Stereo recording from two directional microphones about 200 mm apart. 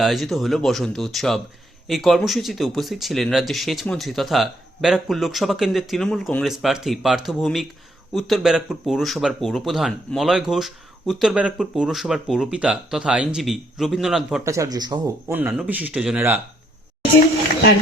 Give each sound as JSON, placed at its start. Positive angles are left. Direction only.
{"t": 0.0, "sound": "speech", "side_deg": 0}
{"t": 14.4, "sound": "speech", "side_deg": -15}
{"t": 15.3, "sound": "speech", "side_deg": -10}